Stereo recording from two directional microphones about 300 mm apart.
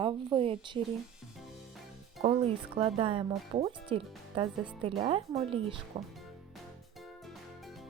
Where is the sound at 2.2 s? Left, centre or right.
Centre.